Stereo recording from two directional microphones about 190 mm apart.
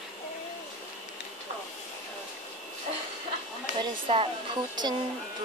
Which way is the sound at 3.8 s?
30° right (ahead or behind).